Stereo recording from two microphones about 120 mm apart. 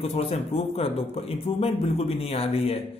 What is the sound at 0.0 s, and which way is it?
Speech, 55° left (ahead or behind).